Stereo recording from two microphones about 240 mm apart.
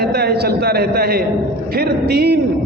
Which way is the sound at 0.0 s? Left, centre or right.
Right.